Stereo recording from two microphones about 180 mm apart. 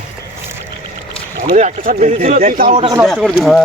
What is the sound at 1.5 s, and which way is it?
Speech, 45° right (ahead or behind).